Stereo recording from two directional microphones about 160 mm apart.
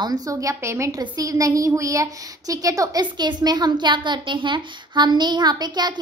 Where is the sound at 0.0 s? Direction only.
25° right (ahead or behind).